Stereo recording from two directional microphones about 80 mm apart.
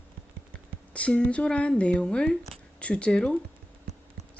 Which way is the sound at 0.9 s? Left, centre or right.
Centre.